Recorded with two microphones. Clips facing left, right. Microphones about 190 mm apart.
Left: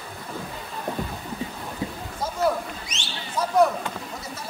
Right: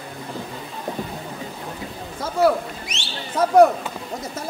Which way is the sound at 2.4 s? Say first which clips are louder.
Right 6 dB; 60° right (ahead or behind).